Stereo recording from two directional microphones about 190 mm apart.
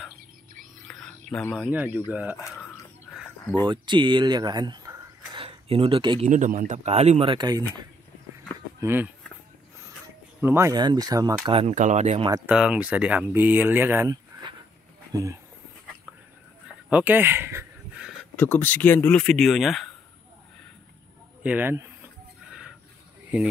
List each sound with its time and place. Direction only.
0.8 s a sound: 5° left (ahead or behind)
1.7 s speech: 10° right (ahead or behind)
3.6 s speech: 25° right (ahead or behind)
6.2 s speech: 40° right (ahead or behind); by 7.6 s 20° right (ahead or behind)
8.8 s speech: 10° right (ahead or behind)
10.4 s speech: 15° right (ahead or behind)
11.4 s speech: 30° right (ahead or behind)
12.4 s speech: 5° right (ahead or behind)
16.9 s speech: 10° right (ahead or behind)
18.3 s speech: 10° left (ahead or behind)
21.4 s speech: 10° right (ahead or behind)